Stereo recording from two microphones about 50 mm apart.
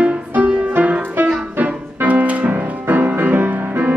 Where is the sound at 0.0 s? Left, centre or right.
Right.